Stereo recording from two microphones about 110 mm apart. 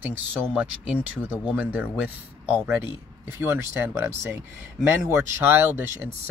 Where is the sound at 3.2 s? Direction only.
20° right (ahead or behind).